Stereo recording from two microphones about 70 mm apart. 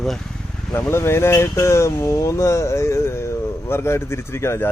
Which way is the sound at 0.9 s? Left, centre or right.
Left.